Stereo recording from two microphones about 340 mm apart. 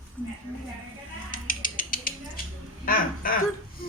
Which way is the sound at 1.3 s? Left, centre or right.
Left.